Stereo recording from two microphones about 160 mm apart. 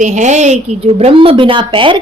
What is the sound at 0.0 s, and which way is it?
A woman's voice, 50° right (ahead or behind).